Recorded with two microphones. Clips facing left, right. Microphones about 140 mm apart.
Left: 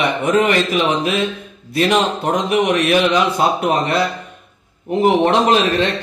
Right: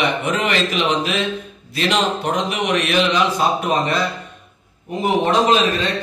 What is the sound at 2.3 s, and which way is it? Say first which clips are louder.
A man's voice: left 4 dB; 50° left (ahead or behind).